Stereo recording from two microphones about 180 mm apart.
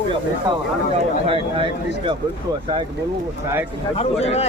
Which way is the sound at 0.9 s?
30° right (ahead or behind).